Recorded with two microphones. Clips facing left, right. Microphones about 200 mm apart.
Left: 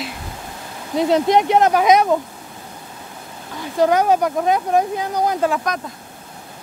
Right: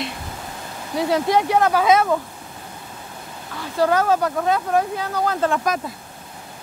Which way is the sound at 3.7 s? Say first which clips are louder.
Left 3 dB; 20° left (ahead or behind).